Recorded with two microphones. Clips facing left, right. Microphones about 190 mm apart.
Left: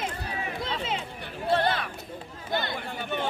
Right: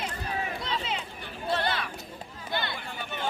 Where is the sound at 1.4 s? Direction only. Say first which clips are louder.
Left 4 dB; 55° left (ahead or behind).